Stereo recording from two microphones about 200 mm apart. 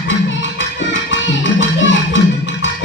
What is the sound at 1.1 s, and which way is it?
Music, 70° left (ahead or behind).